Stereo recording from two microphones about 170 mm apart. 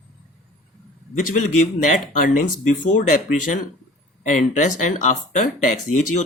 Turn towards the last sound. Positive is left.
turn(degrees=45)  # may be behind; listen again after turning